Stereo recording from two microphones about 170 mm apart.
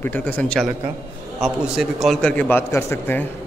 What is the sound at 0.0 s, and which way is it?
A man's voice, 10° left (ahead or behind).